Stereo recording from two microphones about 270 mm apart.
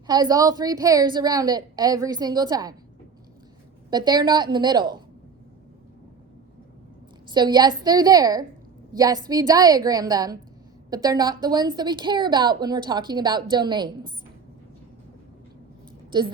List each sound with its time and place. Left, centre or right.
0.1 s a woman's voice: centre
3.8 s a woman's voice: centre
7.3 s a woman's voice: centre
16.1 s a woman's voice: centre